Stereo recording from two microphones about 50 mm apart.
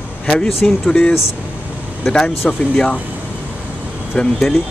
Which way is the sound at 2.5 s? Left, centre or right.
Centre.